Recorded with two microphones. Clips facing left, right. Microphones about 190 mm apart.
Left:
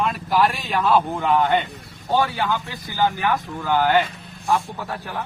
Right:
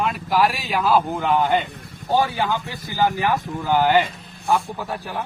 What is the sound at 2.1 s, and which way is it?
Speech, 15° right (ahead or behind).